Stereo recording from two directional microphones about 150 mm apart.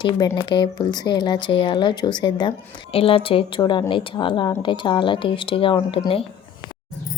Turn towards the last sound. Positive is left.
turn(degrees=35)  # may be behind; listen again after turning